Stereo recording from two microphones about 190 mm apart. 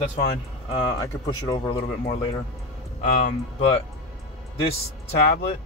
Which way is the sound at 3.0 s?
40° left (ahead or behind).